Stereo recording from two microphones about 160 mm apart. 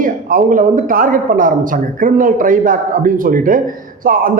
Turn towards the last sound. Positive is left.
turn(degrees=-60)  # may be behind; listen again after turning